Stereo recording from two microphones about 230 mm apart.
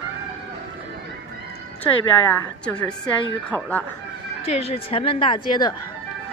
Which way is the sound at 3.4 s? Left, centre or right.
Centre.